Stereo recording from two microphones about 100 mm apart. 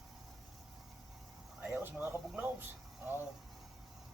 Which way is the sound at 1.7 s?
20° right (ahead or behind).